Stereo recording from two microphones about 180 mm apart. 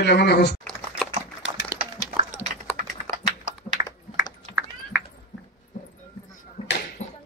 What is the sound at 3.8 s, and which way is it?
Typing, 20° right (ahead or behind).